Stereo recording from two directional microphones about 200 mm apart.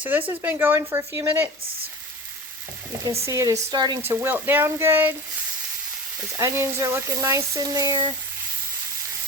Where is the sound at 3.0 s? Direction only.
15° right (ahead or behind).